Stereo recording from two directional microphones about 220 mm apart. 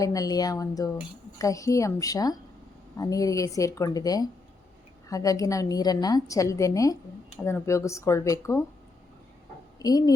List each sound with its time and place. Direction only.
0.0 s a woman's voice: 15° left (ahead or behind)
9.7 s a child's voice: 15° left (ahead or behind)